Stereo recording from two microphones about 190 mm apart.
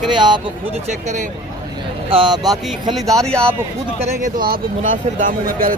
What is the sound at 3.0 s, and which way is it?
Speech, centre (ahead or behind).